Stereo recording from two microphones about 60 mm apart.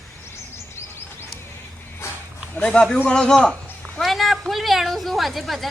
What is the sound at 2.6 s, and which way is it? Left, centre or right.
A man's voice, centre.